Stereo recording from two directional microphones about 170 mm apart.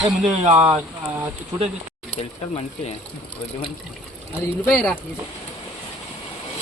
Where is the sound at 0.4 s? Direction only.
40° right (ahead or behind).